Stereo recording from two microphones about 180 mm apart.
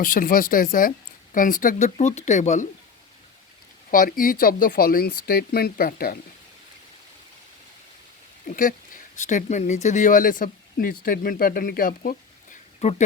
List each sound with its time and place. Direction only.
0.0 s speech: 50° left (ahead or behind)
3.9 s speech: 50° left (ahead or behind)
8.4 s speech: 50° left (ahead or behind)
12.8 s speech: 35° left (ahead or behind)